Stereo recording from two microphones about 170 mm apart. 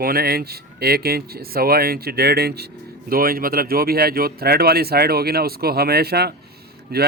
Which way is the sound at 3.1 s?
60° right (ahead or behind).